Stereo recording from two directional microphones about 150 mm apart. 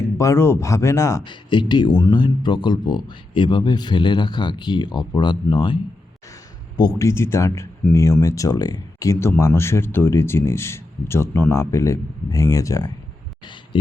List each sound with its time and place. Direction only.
0.2 s speech: 15° left (ahead or behind)
1.2 s speech: 30° left (ahead or behind)